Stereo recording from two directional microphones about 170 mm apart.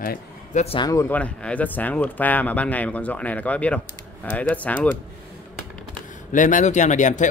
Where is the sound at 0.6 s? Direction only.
35° left (ahead or behind).